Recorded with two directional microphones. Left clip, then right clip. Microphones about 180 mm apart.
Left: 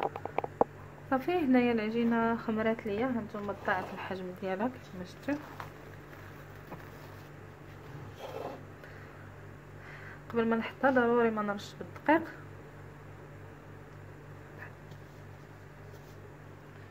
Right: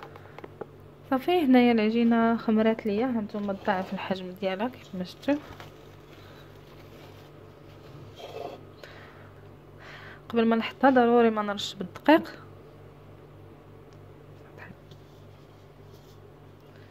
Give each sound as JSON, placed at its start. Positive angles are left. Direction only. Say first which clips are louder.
{"t": 1.0, "sound": "speech", "louder": "right 5 dB", "side_deg": -35}
{"t": 9.8, "sound": "speech", "louder": "right 5 dB", "side_deg": -45}